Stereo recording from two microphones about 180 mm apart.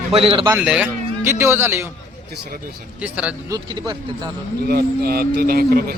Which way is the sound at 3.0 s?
5° right (ahead or behind).